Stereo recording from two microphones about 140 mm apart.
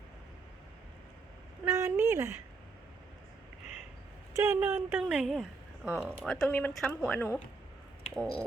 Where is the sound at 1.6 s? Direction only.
20° right (ahead or behind).